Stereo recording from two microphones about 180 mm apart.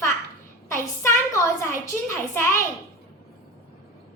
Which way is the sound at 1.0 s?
15° left (ahead or behind).